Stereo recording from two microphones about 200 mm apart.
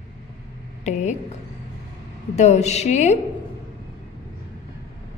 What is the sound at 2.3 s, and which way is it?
Speech, 35° left (ahead or behind).